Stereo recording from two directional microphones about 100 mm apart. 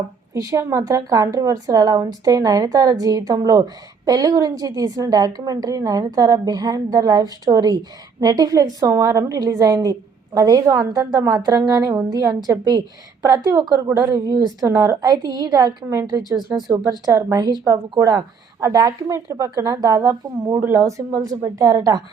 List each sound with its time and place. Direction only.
0.3 s a woman's voice: 30° right (ahead or behind)
17.1 s a woman's voice: 25° right (ahead or behind)
17.3 s a woman's voice: 45° right (ahead or behind)
20.6 s a woman's voice: 20° right (ahead or behind)
20.8 s a woman's voice: 35° right (ahead or behind)